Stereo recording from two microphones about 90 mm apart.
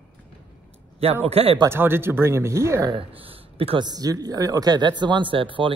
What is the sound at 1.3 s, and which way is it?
Speech, 90° right.